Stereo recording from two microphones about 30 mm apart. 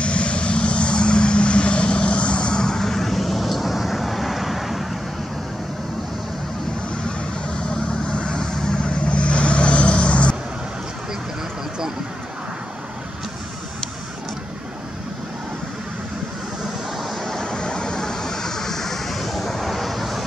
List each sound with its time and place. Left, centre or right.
0.0 s vehicle: left
2.6 s vehicle: centre
7.4 s vehicle: left
8.4 s vehicle: left
9.1 s vehicle: left
17.0 s vehicle: centre
17.4 s vehicle: left; by 20.2 s centre